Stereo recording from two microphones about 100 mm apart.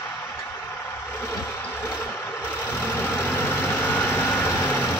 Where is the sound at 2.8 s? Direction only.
25° left (ahead or behind).